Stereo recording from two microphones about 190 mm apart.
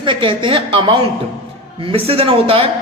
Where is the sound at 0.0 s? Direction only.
25° right (ahead or behind).